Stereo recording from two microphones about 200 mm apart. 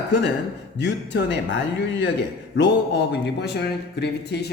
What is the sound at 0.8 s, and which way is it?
Speech, 60° left (ahead or behind).